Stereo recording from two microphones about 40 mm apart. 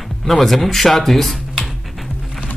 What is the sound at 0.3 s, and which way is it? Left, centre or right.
Speech, centre.